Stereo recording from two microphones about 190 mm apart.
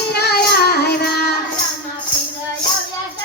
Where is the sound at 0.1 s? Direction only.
55° left (ahead or behind).